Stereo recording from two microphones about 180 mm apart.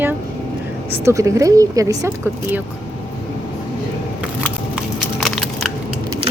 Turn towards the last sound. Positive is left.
turn(degrees=0)  # may be behind; listen again after turning